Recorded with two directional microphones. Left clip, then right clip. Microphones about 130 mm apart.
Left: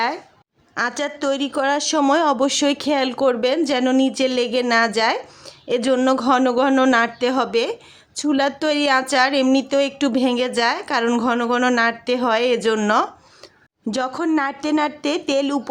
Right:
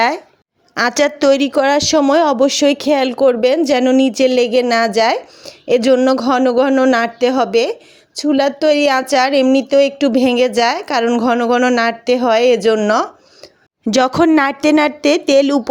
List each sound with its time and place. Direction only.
0.8 s a woman's voice: 50° right (ahead or behind); by 6.0 s 35° right (ahead or behind)
6.1 s a woman's voice: 25° right (ahead or behind)
6.9 s a woman's voice: 30° right (ahead or behind)
13.9 s a woman's voice: 50° right (ahead or behind)